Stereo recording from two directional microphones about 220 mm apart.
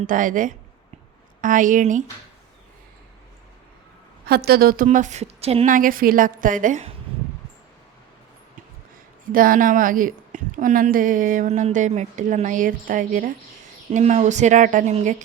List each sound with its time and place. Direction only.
0.1 s a woman's voice: 35° right (ahead or behind)
4.3 s a woman's voice: 45° right (ahead or behind)
9.3 s a woman's voice: 40° right (ahead or behind)